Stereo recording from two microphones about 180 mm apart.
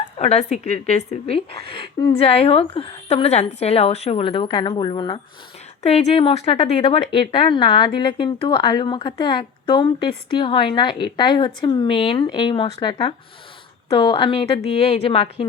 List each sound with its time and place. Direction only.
0.2 s a woman's voice: 35° left (ahead or behind)